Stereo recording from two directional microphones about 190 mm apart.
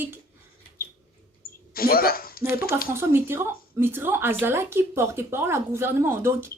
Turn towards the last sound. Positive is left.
turn(degrees=-10)  # may be behind; listen again after turning